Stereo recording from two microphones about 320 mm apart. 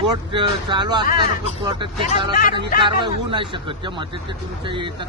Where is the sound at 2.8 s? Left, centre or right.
Centre.